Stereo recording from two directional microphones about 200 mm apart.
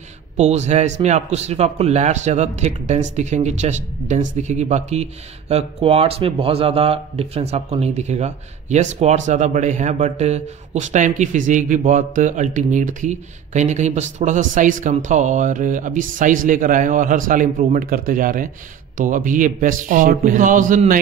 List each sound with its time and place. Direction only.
0.4 s speech: 35° right (ahead or behind)